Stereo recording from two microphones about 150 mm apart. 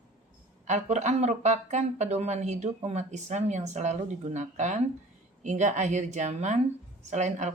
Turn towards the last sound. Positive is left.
turn(degrees=-50)  # may be behind; listen again after turning